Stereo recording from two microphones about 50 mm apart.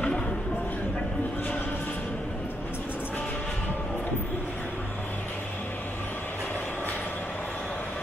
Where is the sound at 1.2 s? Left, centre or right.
Left.